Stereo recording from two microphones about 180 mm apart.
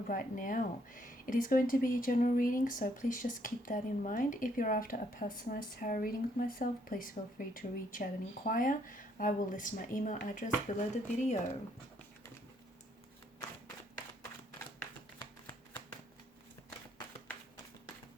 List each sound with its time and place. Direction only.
0.1 s speech: 50° left (ahead or behind)